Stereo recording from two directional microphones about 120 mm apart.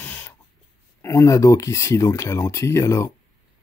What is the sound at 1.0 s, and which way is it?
Speech, 25° left (ahead or behind).